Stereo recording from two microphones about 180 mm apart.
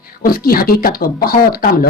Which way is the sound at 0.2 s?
55° left (ahead or behind).